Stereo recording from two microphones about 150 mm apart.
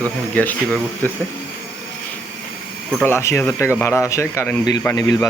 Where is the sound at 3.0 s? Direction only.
15° left (ahead or behind).